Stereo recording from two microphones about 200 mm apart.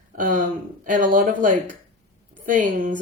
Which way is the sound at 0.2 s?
40° right (ahead or behind).